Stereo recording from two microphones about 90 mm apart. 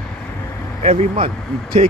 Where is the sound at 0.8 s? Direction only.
90° right.